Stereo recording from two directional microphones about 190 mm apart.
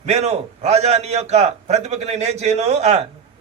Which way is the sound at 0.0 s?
35° right (ahead or behind).